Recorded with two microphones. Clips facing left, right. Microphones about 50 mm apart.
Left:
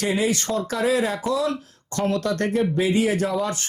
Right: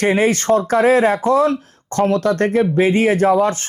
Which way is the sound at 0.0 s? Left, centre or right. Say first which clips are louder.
Right 7 dB; right.